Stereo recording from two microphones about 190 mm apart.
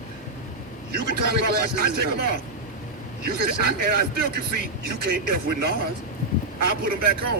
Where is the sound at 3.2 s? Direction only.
55° right (ahead or behind).